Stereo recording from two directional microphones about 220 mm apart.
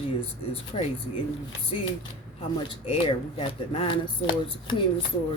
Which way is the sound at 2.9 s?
25° left (ahead or behind).